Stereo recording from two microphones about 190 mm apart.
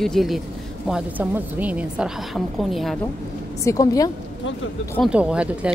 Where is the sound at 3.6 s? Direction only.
20° left (ahead or behind).